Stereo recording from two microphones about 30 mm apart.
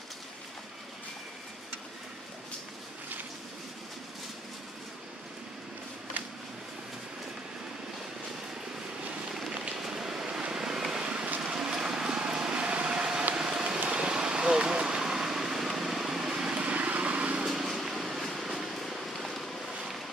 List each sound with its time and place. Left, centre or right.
6.2 s a sound: right
9.8 s vehicle: centre
12.5 s vehicle: right
16.5 s vehicle: right
17.5 s vehicle: centre
18.3 s music: centre
18.9 s vehicle: centre